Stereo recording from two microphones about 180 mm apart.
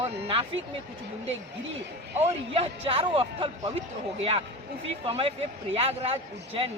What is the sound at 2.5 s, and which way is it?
Speech, 30° right (ahead or behind).